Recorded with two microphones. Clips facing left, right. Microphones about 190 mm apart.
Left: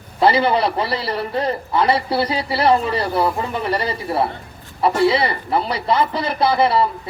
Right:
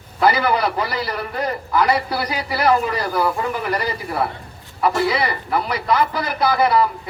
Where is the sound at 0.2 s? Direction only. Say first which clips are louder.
Left 2 dB; 25° left (ahead or behind).